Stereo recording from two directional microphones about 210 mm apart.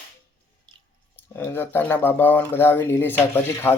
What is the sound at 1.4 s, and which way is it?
Speech, 10° left (ahead or behind).